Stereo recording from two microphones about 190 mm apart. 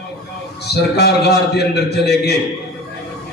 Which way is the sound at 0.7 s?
60° left (ahead or behind).